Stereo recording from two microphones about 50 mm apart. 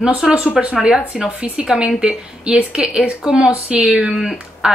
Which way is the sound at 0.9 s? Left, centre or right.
Centre.